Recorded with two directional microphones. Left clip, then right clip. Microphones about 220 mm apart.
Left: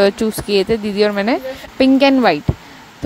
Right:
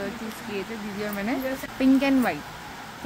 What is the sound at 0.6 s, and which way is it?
Speech, 40° left (ahead or behind).